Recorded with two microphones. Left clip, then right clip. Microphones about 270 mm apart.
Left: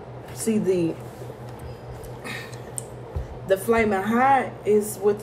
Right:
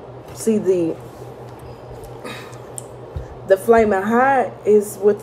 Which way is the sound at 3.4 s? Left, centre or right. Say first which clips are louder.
Right 7 dB; centre.